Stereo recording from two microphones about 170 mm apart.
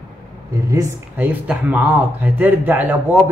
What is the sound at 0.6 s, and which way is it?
Speech, 20° right (ahead or behind).